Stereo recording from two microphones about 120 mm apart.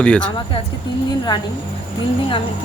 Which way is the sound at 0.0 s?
10° left (ahead or behind).